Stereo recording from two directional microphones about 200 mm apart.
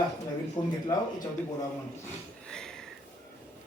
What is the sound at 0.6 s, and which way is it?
Speech, 20° left (ahead or behind).